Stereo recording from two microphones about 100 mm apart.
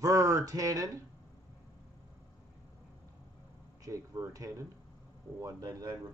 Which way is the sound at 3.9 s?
35° right (ahead or behind).